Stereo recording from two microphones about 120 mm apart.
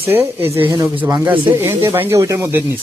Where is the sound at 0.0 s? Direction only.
20° right (ahead or behind).